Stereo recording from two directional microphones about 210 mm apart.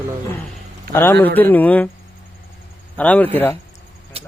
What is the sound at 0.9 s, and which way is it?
Speech, 10° left (ahead or behind).